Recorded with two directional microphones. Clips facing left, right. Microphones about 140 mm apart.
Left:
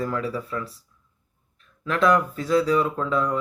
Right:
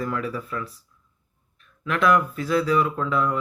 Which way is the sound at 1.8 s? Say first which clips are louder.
Even; 35° left (ahead or behind).